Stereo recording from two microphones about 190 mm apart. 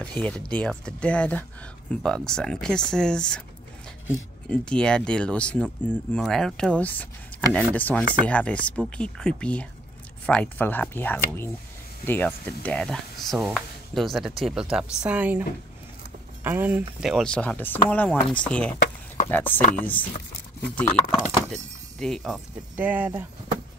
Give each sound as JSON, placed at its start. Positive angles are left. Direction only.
{"t": 0.0, "sound": "speech", "side_deg": 5}
{"t": 4.5, "sound": "speech", "side_deg": 5}
{"t": 16.4, "sound": "speech", "side_deg": -10}
{"t": 19.6, "sound": "speech", "side_deg": 40}
{"t": 21.5, "sound": "speech", "side_deg": 0}